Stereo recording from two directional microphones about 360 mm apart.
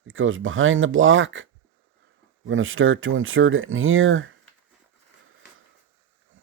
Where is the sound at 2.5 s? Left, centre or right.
Right.